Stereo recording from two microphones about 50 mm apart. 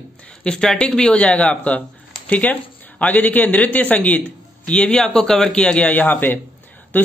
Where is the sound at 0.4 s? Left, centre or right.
Centre.